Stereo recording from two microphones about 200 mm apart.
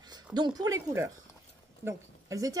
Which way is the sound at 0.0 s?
20° right (ahead or behind).